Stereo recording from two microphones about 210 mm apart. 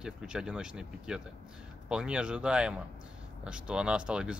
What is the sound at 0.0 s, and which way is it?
Speech, 5° right (ahead or behind).